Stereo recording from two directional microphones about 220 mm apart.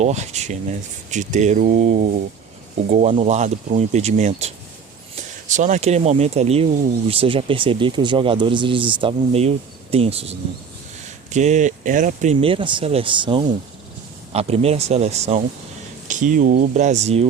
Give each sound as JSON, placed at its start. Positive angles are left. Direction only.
{"t": 0.0, "sound": "speech", "side_deg": -30}